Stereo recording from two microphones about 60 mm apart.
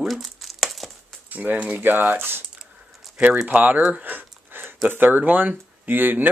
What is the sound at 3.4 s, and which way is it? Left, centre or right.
Speech, right.